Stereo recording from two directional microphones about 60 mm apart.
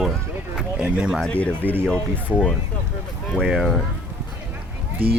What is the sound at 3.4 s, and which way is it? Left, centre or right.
Speech, centre.